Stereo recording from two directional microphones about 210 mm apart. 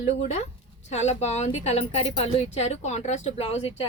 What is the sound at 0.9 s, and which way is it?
A woman's voice, 35° left (ahead or behind).